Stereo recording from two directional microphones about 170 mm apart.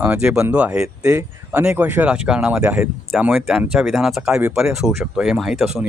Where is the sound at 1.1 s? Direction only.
20° right (ahead or behind).